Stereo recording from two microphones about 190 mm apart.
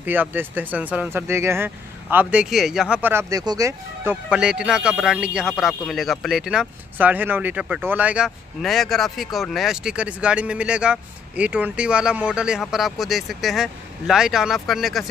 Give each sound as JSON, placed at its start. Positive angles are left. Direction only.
{"t": 0.0, "sound": "speech", "side_deg": -10}